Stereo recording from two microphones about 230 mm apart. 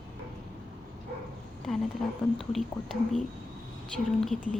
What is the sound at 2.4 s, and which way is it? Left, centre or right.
A woman's voice, centre.